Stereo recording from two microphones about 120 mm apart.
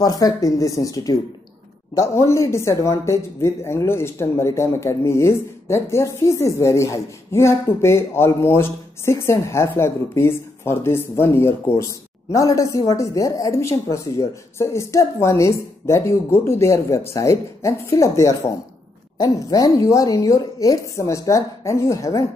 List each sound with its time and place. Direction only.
0.0 s speech: 30° left (ahead or behind)